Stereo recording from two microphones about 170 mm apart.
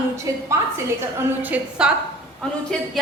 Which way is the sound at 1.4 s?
5° right (ahead or behind).